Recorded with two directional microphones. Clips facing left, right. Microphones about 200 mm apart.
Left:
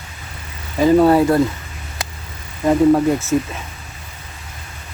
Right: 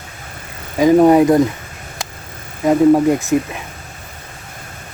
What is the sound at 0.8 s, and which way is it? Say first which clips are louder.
Speech: right 2 dB; 15° right (ahead or behind).